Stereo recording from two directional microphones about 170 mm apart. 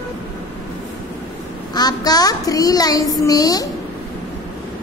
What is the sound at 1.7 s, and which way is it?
A child's voice, 25° left (ahead or behind).